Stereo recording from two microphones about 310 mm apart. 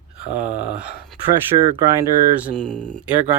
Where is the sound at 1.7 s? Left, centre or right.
Centre.